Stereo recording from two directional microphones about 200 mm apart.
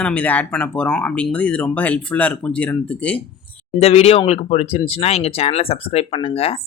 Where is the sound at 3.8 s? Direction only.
30° left (ahead or behind).